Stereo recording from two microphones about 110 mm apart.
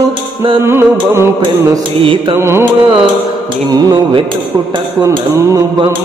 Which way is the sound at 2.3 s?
25° right (ahead or behind).